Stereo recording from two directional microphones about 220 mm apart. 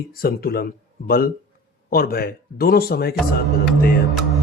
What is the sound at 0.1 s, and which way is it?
Speech, 45° left (ahead or behind).